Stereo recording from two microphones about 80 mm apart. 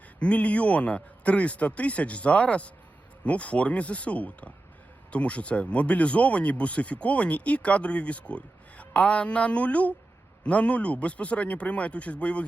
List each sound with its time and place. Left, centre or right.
0.2 s speech: centre